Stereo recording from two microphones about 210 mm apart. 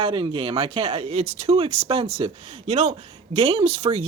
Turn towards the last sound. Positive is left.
turn(degrees=-25)  # may be behind; listen again after turning